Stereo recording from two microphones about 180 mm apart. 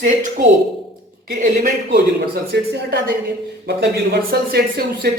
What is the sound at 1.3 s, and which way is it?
Speech, 50° right (ahead or behind).